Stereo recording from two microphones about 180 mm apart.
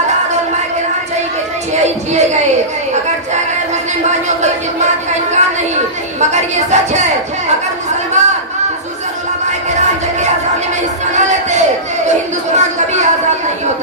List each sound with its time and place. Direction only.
4.4 s speech: 40° right (ahead or behind)
8.2 s chatter: 40° right (ahead or behind)
11.1 s crowd: 40° right (ahead or behind)
12.4 s a sound: 40° right (ahead or behind)